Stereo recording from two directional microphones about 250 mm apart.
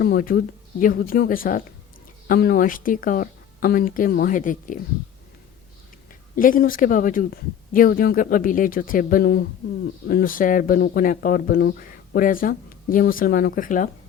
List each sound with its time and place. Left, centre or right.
0.0 s speech: left
6.3 s speech: left